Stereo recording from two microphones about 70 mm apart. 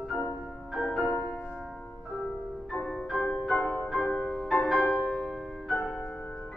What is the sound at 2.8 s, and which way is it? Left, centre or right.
Music, centre.